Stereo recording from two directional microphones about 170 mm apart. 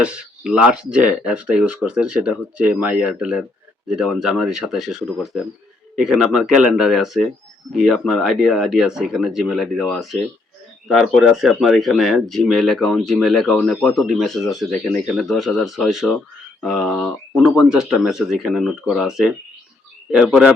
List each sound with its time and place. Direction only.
0.0 s speech: 5° right (ahead or behind)